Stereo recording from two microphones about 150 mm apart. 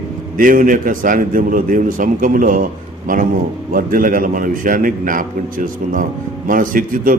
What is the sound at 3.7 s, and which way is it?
A man's voice, 65° right (ahead or behind).